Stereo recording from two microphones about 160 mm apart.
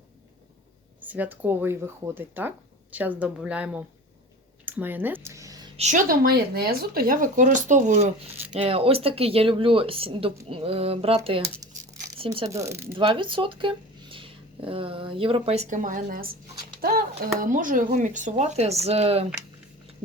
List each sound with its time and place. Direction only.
1.0 s speech: 10° right (ahead or behind)
5.7 s speech: 50° right (ahead or behind)
8.5 s speech: 35° right (ahead or behind)
12.5 s speech: 20° right (ahead or behind)
13.0 s speech: 30° right (ahead or behind); by 16.3 s 65° right (ahead or behind)
17.4 s speech: 55° right (ahead or behind); by 19.2 s 40° right (ahead or behind)
20.0 s a sound: 35° right (ahead or behind)